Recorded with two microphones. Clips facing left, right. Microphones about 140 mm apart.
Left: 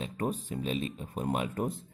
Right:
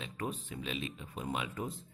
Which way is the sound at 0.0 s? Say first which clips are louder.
Left 6 dB; 40° left (ahead or behind).